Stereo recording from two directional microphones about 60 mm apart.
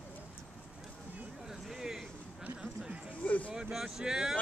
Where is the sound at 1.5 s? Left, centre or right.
Centre.